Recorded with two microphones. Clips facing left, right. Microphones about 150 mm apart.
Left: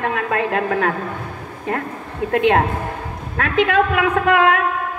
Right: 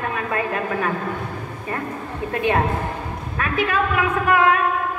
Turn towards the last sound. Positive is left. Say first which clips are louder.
# left 2 dB
turn(degrees=90)